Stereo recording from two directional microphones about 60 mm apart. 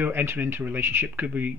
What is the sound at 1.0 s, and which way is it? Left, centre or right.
Speech, right.